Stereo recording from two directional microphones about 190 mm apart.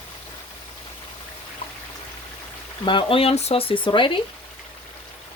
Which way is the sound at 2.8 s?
25° left (ahead or behind).